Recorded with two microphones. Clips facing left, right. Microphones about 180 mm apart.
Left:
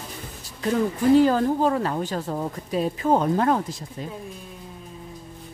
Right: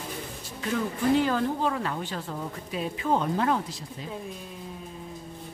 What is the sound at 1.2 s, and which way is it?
Speech, 40° left (ahead or behind).